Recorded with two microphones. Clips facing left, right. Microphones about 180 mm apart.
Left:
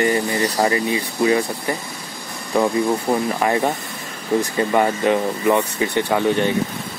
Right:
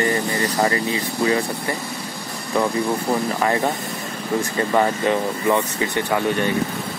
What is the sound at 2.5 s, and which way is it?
Speech, 15° left (ahead or behind).